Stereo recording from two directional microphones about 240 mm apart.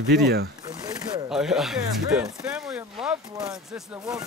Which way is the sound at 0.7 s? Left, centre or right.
Centre.